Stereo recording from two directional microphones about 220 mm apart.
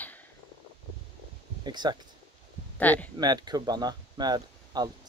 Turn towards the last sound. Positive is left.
turn(degrees=-20)  # may be behind; listen again after turning